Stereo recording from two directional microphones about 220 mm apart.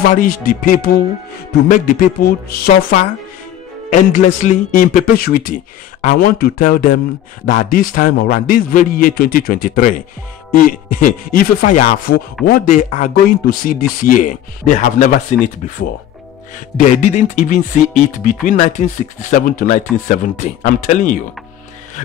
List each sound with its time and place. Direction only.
0.0 s speech: 40° left (ahead or behind)
1.7 s music: 40° left (ahead or behind)
3.9 s speech: 35° left (ahead or behind)
16.7 s speech: 35° left (ahead or behind)